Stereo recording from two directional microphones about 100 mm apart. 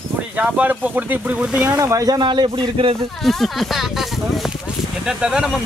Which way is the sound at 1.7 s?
35° right (ahead or behind).